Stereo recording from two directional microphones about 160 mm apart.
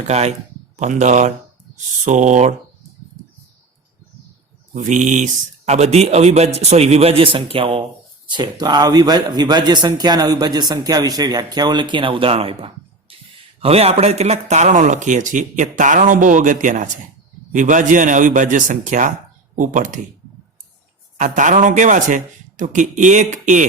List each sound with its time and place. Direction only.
0.1 s speech: 45° right (ahead or behind)
4.7 s a man's voice: 50° right (ahead or behind)
21.2 s speech: 50° right (ahead or behind)